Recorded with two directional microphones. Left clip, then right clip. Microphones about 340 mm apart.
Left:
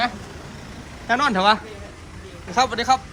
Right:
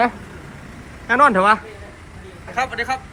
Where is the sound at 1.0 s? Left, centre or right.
Centre.